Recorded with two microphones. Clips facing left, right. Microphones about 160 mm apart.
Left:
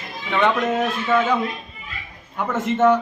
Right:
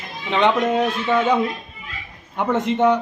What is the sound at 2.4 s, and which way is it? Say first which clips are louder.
Speech: right 1 dB; 20° right (ahead or behind).